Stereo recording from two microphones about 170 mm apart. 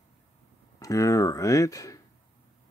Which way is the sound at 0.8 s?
20° left (ahead or behind).